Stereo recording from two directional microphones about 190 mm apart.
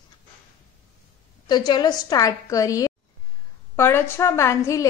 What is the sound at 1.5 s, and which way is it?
A woman's voice, 20° left (ahead or behind).